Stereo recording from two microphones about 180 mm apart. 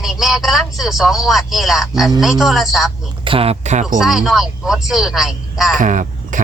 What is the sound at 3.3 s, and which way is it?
Speech, 30° right (ahead or behind).